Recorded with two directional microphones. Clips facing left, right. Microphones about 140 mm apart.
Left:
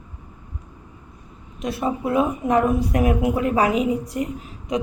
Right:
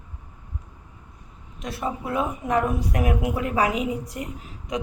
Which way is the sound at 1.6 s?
20° left (ahead or behind).